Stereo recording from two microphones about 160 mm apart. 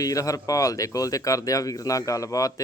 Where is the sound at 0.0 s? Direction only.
20° left (ahead or behind).